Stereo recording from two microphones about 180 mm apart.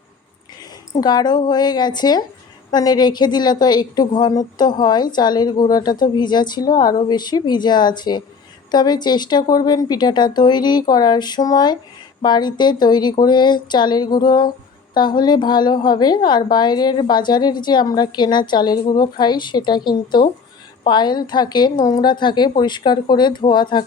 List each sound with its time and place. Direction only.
1.0 s a woman's voice: 25° left (ahead or behind)